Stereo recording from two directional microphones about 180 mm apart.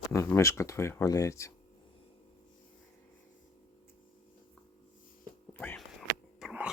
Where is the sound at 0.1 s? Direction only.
15° left (ahead or behind).